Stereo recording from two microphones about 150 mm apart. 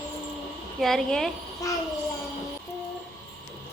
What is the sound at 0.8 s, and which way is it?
Speech, 5° left (ahead or behind).